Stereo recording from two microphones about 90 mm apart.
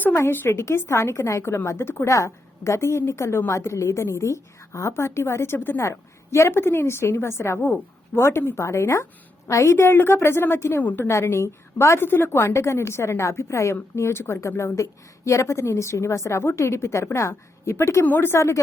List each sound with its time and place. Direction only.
0.0 s a woman's voice: 30° left (ahead or behind)